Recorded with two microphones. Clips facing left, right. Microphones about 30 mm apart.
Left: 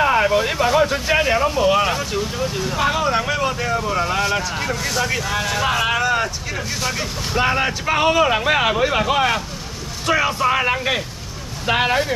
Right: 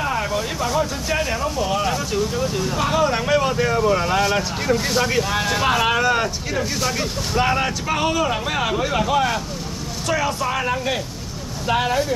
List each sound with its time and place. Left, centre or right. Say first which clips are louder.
0.0 s speech: left 7 dB; left
2.1 s speech: right 1 dB; centre
4.8 s speech: right 1 dB; centre
5.1 s speech: right 1 dB; centre; by 12.1 s left